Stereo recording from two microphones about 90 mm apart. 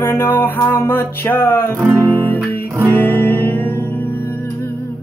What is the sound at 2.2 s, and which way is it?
Music, 20° left (ahead or behind).